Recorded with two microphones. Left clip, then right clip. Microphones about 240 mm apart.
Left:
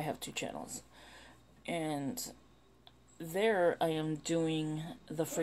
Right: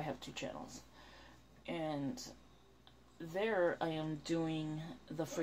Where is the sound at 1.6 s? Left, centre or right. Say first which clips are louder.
Left 4 dB; left.